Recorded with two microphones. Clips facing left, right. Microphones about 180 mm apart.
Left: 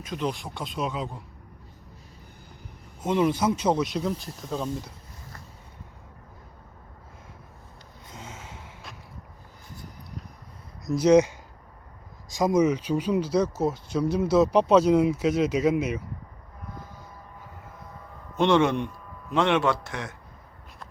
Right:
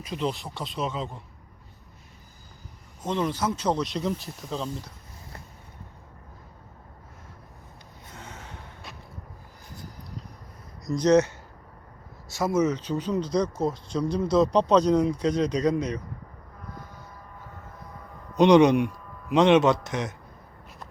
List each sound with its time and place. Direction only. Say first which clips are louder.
0.1 s a man's voice: even; centre (ahead or behind)
3.0 s speech: left 4 dB; 10° left (ahead or behind)
8.1 s gasp: left 2 dB; 10° left (ahead or behind)
10.8 s speech: left 2 dB; 10° left (ahead or behind)
18.3 s a man's voice: right 5 dB; 15° right (ahead or behind)